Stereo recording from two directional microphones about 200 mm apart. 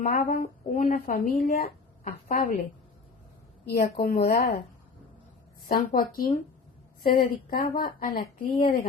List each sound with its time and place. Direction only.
0.0 s speech: 40° left (ahead or behind)
3.7 s speech: 50° left (ahead or behind)
5.6 s speech: 45° left (ahead or behind)